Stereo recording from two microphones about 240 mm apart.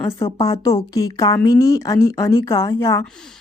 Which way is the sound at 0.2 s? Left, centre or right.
Centre.